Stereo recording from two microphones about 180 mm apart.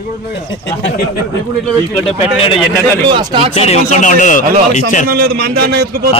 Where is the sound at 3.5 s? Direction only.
35° left (ahead or behind).